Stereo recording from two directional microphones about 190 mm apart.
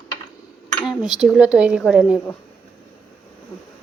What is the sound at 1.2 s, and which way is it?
A woman's voice, 5° right (ahead or behind).